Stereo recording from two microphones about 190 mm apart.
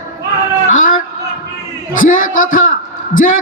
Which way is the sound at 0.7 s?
45° left (ahead or behind).